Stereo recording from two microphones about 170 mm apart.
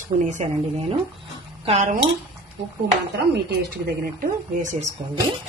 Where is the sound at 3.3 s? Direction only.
75° right (ahead or behind).